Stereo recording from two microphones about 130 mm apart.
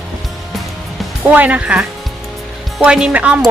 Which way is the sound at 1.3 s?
10° right (ahead or behind).